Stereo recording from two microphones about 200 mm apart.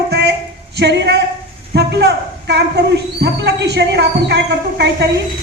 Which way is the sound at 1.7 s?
55° right (ahead or behind).